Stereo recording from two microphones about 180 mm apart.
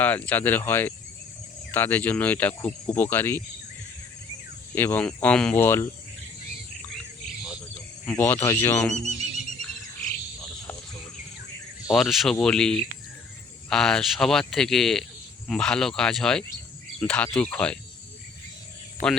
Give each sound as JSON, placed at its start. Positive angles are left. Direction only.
{"t": 0.0, "sound": "speech", "side_deg": 10}
{"t": 4.7, "sound": "speech", "side_deg": 10}
{"t": 8.1, "sound": "speech", "side_deg": 15}
{"t": 9.0, "sound": "neigh", "side_deg": -40}
{"t": 11.9, "sound": "speech", "side_deg": 0}
{"t": 19.0, "sound": "speech", "side_deg": 5}